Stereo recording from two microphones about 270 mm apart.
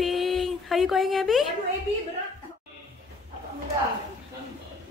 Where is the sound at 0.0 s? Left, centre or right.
Centre.